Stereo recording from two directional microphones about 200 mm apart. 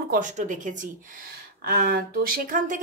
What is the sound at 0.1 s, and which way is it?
Speech, 40° right (ahead or behind).